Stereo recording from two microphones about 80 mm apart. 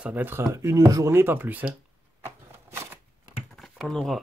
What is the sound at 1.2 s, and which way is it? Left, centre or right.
Speech, right.